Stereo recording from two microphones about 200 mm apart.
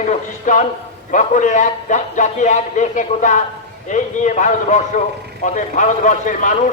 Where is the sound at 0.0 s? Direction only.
40° left (ahead or behind).